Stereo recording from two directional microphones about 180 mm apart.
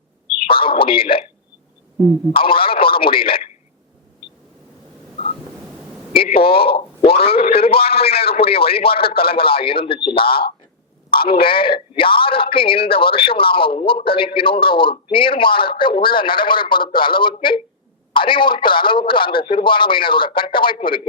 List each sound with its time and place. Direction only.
0.5 s a sound: 30° left (ahead or behind)
2.4 s speech: 30° left (ahead or behind)
6.1 s a man's voice: 30° left (ahead or behind)
7.4 s speech: 60° left (ahead or behind)
7.7 s a man's voice: 30° left (ahead or behind)
10.2 s speech: 55° left (ahead or behind)
11.3 s speech: 30° left (ahead or behind)